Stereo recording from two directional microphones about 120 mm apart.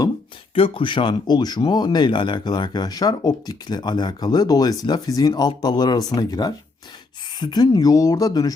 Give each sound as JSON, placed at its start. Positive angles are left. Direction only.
{"t": 0.5, "sound": "speech", "side_deg": 45}